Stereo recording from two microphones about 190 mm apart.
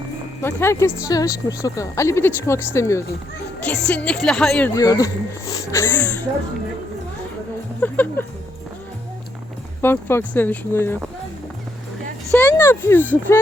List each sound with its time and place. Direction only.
0.4 s speech: 15° left (ahead or behind)
4.7 s speech: 20° left (ahead or behind)
7.8 s a sound: 10° left (ahead or behind)
9.8 s speech: 10° left (ahead or behind)
12.3 s speech: 10° left (ahead or behind)